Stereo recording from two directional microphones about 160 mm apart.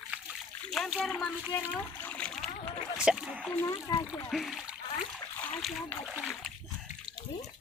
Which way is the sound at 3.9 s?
25° left (ahead or behind).